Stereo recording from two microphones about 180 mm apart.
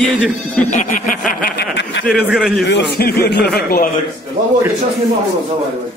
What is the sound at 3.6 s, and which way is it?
Speech, 55° left (ahead or behind).